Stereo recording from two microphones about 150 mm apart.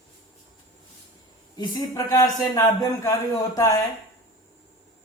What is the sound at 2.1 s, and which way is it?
Speech, 20° left (ahead or behind).